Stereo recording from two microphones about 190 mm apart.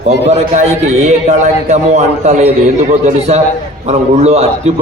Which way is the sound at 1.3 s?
35° right (ahead or behind).